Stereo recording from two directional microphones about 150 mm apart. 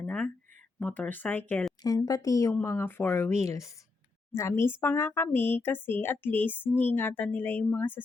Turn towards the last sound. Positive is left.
turn(degrees=15)  # may be behind; listen again after turning